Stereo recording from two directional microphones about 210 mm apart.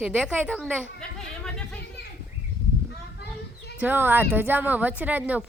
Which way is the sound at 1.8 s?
55° left (ahead or behind).